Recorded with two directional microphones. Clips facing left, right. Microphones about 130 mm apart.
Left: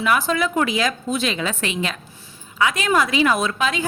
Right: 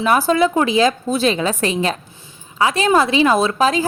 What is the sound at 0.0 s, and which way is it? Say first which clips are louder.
A woman's voice: right 5 dB; 35° right (ahead or behind).